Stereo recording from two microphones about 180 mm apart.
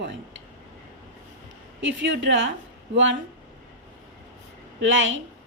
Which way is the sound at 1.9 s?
90° right.